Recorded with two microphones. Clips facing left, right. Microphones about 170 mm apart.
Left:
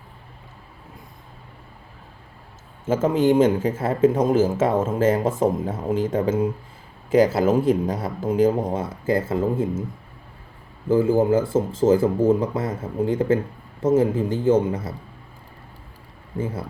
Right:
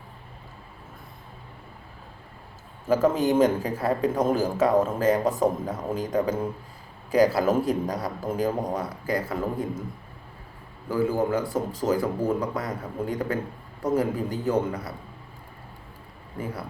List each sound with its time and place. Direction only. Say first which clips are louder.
2.8 s speech: left 3 dB; 25° left (ahead or behind)
10.8 s speech: left 6 dB; 25° left (ahead or behind)